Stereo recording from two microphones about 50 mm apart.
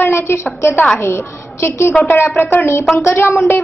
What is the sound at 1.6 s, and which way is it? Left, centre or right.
Speech, left.